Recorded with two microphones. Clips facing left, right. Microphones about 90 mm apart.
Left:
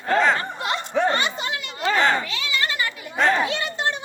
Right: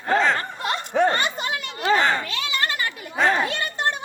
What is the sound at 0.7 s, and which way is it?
Chatter, 50° right (ahead or behind).